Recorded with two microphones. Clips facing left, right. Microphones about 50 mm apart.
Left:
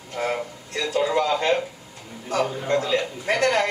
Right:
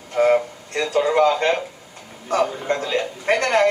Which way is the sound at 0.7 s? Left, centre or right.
Right.